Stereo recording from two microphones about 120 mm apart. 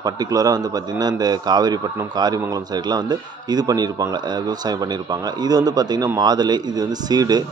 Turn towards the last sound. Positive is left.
turn(degrees=-35)  # may be behind; listen again after turning